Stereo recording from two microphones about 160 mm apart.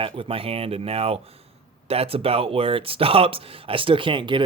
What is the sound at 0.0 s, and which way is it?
Speech, 35° right (ahead or behind).